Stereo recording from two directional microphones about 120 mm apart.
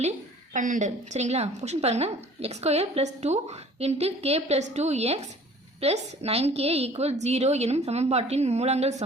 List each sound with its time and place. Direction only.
0.5 s a woman's voice: 90° right; by 9.0 s 70° right (ahead or behind)